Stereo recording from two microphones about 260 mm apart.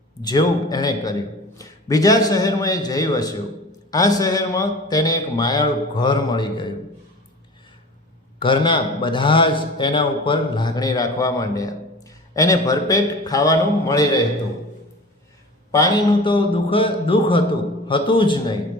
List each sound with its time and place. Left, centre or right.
0.2 s a man's voice: centre
8.4 s a man's voice: centre
15.7 s a man's voice: centre